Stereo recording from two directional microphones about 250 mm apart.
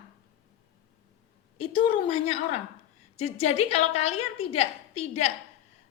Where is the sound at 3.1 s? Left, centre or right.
Left.